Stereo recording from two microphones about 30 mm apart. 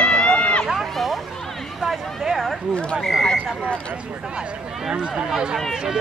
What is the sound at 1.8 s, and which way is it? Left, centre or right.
Speech, right.